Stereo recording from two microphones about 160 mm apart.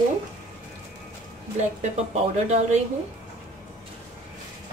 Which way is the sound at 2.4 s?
45° right (ahead or behind).